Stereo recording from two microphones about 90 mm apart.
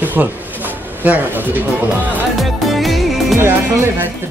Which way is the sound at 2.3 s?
Centre (ahead or behind).